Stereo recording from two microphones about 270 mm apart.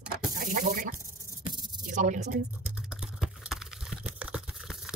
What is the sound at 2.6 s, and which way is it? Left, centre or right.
Typing, centre.